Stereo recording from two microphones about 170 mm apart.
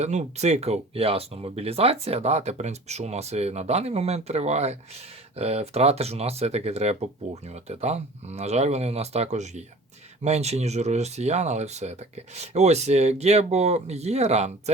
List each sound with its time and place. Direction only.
0.0 s speech: 40° right (ahead or behind)